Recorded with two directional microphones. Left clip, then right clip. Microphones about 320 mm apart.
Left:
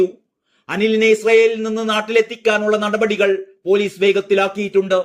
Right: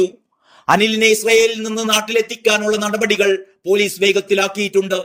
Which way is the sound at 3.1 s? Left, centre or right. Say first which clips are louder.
Right 4 dB; right.